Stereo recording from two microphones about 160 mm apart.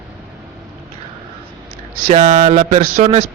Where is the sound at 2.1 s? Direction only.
50° right (ahead or behind).